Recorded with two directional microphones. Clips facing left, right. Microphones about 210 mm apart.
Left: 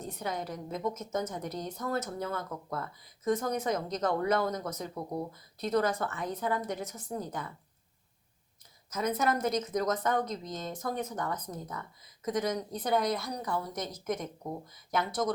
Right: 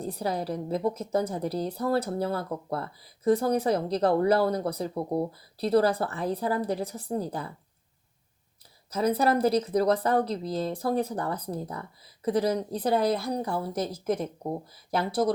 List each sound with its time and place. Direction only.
0.0 s a woman's voice: 35° right (ahead or behind)
8.9 s a woman's voice: 35° right (ahead or behind)